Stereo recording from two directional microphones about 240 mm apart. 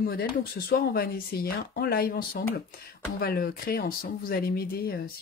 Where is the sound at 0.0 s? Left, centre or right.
Left.